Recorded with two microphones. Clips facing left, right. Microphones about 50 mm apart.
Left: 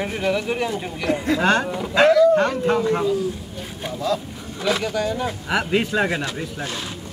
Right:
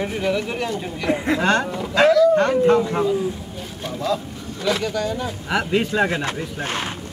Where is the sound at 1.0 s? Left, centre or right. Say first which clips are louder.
Right 1 dB; centre.